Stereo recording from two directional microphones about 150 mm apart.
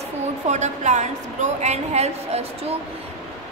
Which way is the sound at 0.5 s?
50° right (ahead or behind).